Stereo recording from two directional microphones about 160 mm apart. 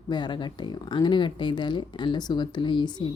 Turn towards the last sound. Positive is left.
turn(degrees=30)  # may be behind; listen again after turning